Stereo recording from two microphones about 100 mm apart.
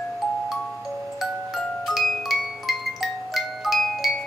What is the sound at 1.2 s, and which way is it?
Glockenspiel, centre (ahead or behind).